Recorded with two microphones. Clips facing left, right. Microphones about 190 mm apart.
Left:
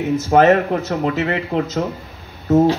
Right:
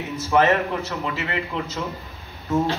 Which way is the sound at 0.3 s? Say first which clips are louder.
Left 6 dB; 45° left (ahead or behind).